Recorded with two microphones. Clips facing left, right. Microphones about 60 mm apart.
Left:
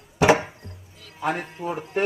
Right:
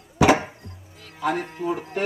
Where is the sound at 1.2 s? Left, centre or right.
Left.